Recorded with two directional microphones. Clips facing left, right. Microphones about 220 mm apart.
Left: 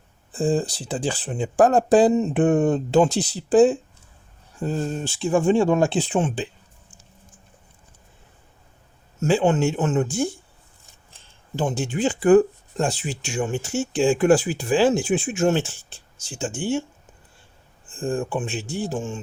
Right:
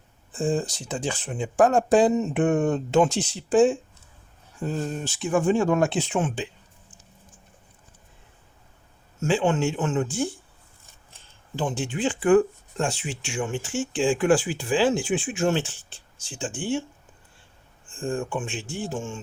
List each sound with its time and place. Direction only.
0.3 s speech: 35° left (ahead or behind)
9.2 s speech: 40° left (ahead or behind)
11.5 s speech: 40° left (ahead or behind)
17.9 s speech: 35° left (ahead or behind)